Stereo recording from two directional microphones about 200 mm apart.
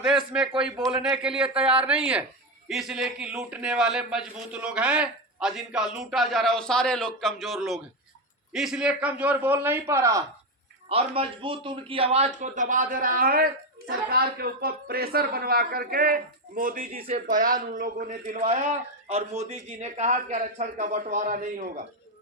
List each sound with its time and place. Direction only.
0.0 s a man's voice: 5° right (ahead or behind)
10.8 s a man's voice: 30° right (ahead or behind)